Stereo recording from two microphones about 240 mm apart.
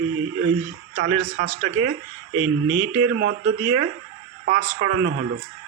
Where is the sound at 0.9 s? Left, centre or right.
Right.